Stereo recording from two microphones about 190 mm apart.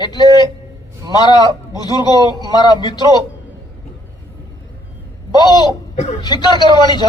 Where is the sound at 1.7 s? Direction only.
20° left (ahead or behind).